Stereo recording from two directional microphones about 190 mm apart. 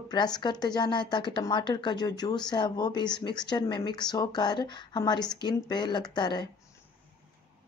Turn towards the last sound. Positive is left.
turn(degrees=25)  # may be behind; listen again after turning